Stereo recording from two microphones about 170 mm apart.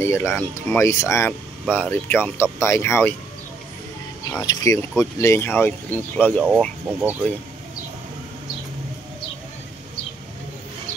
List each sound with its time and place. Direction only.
0.0 s speech: 15° left (ahead or behind)
4.4 s speech: 20° left (ahead or behind)
6.9 s speech: 10° right (ahead or behind)